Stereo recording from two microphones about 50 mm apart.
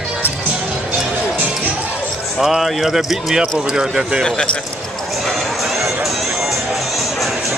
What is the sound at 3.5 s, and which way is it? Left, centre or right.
Speech, centre.